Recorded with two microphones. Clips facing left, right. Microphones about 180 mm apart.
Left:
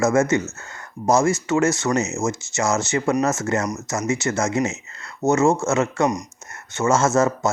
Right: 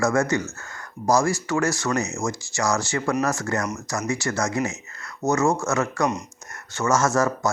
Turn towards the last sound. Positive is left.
turn(degrees=25)  # may be behind; listen again after turning